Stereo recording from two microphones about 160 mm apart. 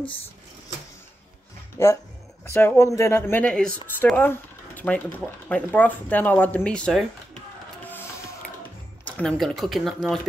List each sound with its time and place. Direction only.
1.8 s speech: 15° left (ahead or behind)
7.9 s music: 10° left (ahead or behind)
9.0 s speech: 5° left (ahead or behind)